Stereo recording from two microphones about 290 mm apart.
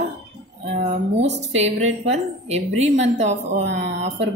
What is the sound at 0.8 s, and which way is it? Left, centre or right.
A woman's voice, right.